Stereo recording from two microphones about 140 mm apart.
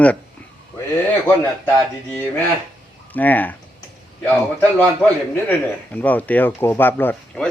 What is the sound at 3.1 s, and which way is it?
Speech, 10° left (ahead or behind).